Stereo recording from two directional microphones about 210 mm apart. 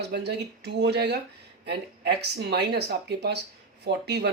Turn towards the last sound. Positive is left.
turn(degrees=-50)  # may be behind; listen again after turning